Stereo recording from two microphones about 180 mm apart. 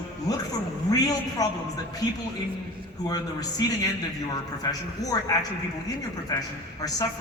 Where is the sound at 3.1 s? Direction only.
20° left (ahead or behind).